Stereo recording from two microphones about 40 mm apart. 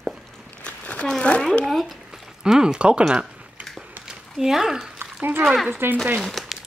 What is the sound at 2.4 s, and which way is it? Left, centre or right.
Speech, centre.